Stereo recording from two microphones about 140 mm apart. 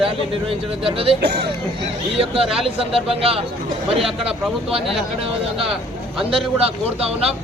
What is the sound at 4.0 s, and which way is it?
Speech, 5° right (ahead or behind).